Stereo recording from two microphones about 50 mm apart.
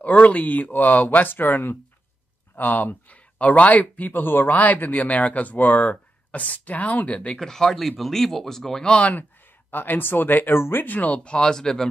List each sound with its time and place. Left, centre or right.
0.0 s speech: left
7.3 s speech: centre
8.8 s speech: left
9.7 s speech: left
11.2 s speech: centre